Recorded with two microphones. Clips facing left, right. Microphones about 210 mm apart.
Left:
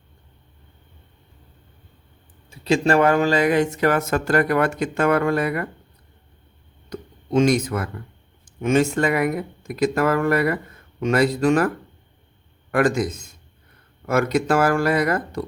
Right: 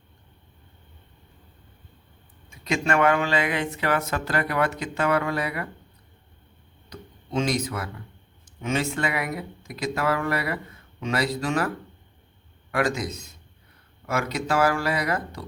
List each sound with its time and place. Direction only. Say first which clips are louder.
2.5 s speech: left 6 dB; 30° left (ahead or behind); by 5.6 s 50° left (ahead or behind)
6.9 s speech: left 8 dB; 50° left (ahead or behind)
12.7 s speech: left 6 dB; 50° left (ahead or behind)